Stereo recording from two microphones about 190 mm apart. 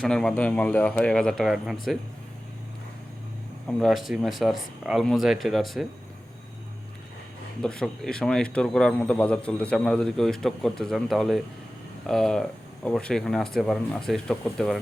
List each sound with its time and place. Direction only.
0.0 s a man's voice: 5° left (ahead or behind)
3.7 s a man's voice: centre (ahead or behind)
7.6 s a man's voice: 5° left (ahead or behind)